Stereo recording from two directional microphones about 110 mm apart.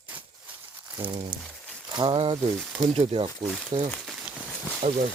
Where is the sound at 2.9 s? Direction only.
65° right (ahead or behind).